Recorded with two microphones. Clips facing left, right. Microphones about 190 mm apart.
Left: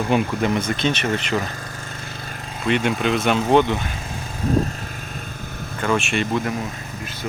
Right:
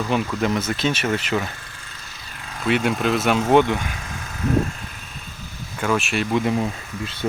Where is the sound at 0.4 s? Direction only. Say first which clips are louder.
Left 1 dB; 5° right (ahead or behind).